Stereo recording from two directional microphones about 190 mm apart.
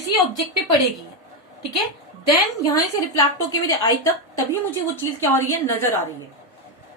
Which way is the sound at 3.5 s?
15° left (ahead or behind).